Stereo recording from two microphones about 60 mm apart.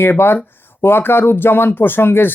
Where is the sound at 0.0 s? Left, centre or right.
Left.